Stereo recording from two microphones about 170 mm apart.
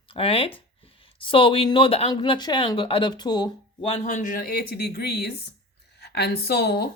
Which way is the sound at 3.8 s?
40° left (ahead or behind).